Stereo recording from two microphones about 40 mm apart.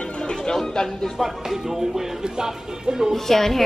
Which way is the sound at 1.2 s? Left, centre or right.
Centre.